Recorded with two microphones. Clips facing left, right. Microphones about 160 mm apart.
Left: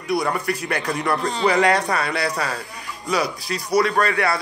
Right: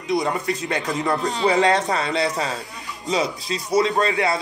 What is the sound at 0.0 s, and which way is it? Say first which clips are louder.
A man's voice: even; 20° right (ahead or behind).